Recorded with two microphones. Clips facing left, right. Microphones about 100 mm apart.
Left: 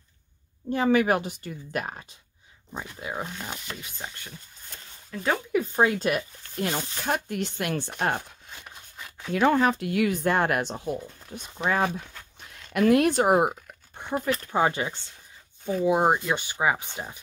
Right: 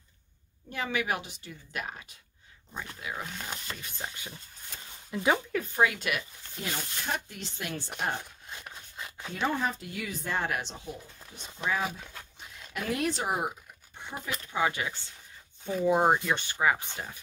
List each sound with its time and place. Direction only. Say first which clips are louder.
0.7 s speech: left 10 dB; 40° left (ahead or behind)
2.7 s speech: left 4 dB; 25° left (ahead or behind)
3.3 s speech: left 2 dB; 5° left (ahead or behind)
5.8 s speech: left 3 dB; 35° left (ahead or behind)
6.6 s speech: left 7 dB; 55° left (ahead or behind)
9.3 s speech: left 9 dB; 90° left; by 14.3 s 55° left (ahead or behind)
14.5 s speech: left 3 dB; 35° left (ahead or behind)
15.8 s speech: left 2 dB; 10° left (ahead or behind)